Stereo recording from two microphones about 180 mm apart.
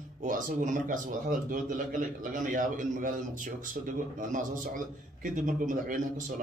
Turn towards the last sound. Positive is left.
turn(degrees=-45)  # may be behind; listen again after turning